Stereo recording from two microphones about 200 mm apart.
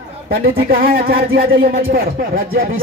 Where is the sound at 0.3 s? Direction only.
45° right (ahead or behind).